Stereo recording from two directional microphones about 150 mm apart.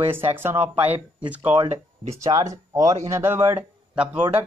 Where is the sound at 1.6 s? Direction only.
45° right (ahead or behind).